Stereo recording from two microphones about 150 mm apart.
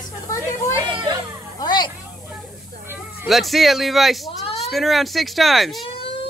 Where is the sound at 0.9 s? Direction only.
30° right (ahead or behind).